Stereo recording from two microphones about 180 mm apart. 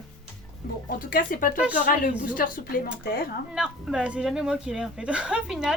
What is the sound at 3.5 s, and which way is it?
Speech, 5° right (ahead or behind).